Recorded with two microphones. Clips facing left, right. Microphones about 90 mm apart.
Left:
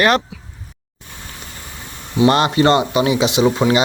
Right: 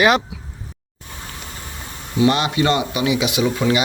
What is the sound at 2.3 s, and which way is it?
Speech, 45° left (ahead or behind).